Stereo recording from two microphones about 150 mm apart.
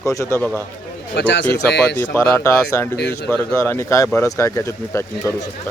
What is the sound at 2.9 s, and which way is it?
Speech, 90° left.